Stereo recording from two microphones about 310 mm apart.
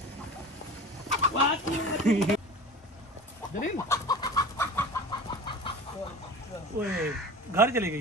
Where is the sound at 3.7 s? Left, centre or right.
Centre.